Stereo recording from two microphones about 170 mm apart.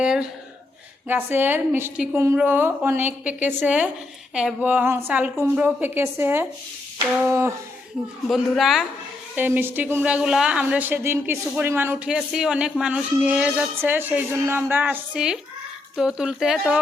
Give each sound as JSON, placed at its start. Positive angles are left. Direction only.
{"t": 0.0, "sound": "a woman's voice", "side_deg": -5}
{"t": 8.3, "sound": "a woman's voice", "side_deg": 0}
{"t": 9.3, "sound": "a woman's voice", "side_deg": -10}